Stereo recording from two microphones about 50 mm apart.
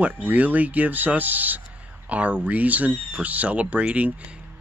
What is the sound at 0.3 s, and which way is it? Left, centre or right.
Speech, right.